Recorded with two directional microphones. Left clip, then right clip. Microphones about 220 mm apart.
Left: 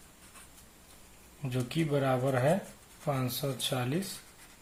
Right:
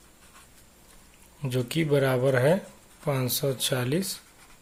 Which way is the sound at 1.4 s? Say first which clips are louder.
Right 6 dB; 40° right (ahead or behind).